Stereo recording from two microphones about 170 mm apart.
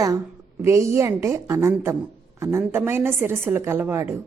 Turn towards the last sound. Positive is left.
turn(degrees=-15)  # may be behind; listen again after turning